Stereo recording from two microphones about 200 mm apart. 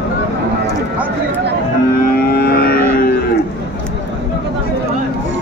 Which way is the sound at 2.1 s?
50° left (ahead or behind).